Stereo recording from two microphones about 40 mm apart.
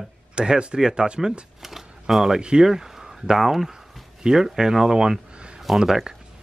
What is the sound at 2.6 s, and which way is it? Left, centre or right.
Speech, centre.